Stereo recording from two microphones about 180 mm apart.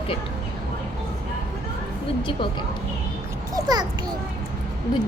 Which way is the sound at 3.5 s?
20° right (ahead or behind).